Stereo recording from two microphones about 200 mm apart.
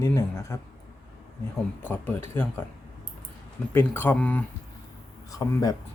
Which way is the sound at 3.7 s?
10° left (ahead or behind).